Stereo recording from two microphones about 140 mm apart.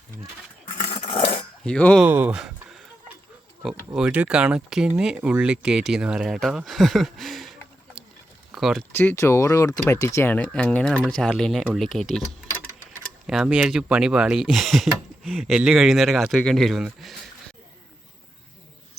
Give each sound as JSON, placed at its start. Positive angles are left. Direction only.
{"t": 0.9, "sound": "dog", "side_deg": 45}
{"t": 1.6, "sound": "speech", "side_deg": 5}
{"t": 2.0, "sound": "a sound", "side_deg": -10}
{"t": 3.6, "sound": "speech", "side_deg": -5}
{"t": 8.5, "sound": "speech", "side_deg": 0}
{"t": 8.9, "sound": "speech", "side_deg": 15}
{"t": 13.2, "sound": "speech", "side_deg": -5}